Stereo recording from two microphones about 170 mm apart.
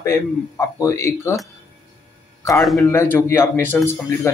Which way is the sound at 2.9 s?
15° left (ahead or behind).